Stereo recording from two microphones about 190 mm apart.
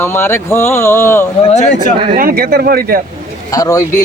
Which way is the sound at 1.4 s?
40° left (ahead or behind).